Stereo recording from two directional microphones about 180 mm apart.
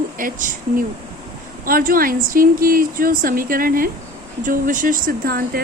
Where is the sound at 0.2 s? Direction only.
50° right (ahead or behind).